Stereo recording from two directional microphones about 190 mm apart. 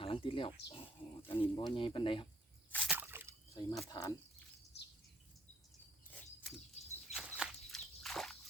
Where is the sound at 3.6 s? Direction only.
20° left (ahead or behind).